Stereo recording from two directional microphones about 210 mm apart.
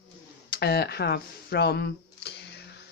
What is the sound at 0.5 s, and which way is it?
Speech, 50° left (ahead or behind).